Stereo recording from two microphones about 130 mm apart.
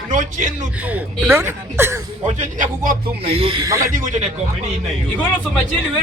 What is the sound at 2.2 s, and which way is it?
Speech, 80° right.